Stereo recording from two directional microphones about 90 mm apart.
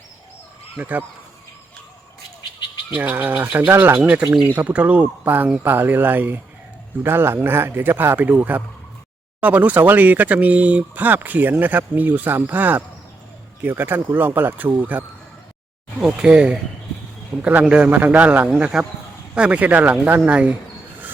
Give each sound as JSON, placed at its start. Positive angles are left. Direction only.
{"t": 0.8, "sound": "speech", "side_deg": -20}
{"t": 2.9, "sound": "a man's voice", "side_deg": -20}
{"t": 16.0, "sound": "a man's voice", "side_deg": -10}